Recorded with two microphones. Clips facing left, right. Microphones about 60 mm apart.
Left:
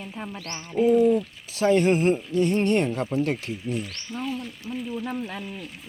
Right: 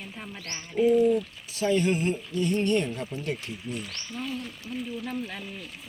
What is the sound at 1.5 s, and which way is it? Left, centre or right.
Speech, left.